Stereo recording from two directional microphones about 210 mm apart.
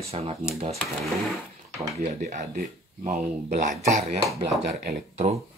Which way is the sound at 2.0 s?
35° right (ahead or behind).